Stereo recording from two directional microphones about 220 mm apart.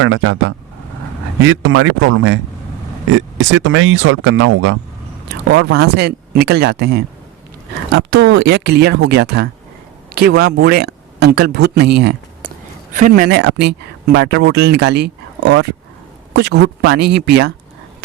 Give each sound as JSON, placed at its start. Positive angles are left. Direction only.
{"t": 0.0, "sound": "speech", "side_deg": -65}
{"t": 5.5, "sound": "speech", "side_deg": -50}